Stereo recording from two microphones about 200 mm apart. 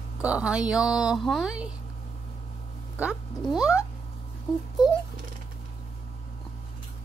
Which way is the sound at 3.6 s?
15° left (ahead or behind).